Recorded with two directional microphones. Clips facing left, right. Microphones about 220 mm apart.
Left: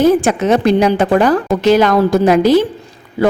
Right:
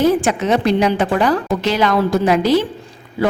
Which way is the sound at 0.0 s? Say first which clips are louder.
Left 4 dB; 45° left (ahead or behind).